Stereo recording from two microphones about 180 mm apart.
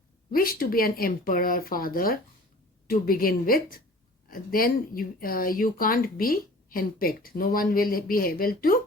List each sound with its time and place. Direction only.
0.3 s speech: 50° left (ahead or behind)